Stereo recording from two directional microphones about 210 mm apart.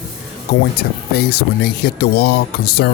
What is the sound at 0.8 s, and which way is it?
Speech, 50° left (ahead or behind).